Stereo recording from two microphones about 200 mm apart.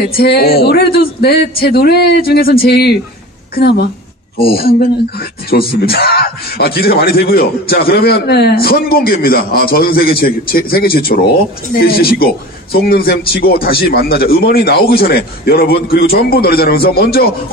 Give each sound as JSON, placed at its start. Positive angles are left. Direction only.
{"t": 0.1, "sound": "a man's voice", "side_deg": 50}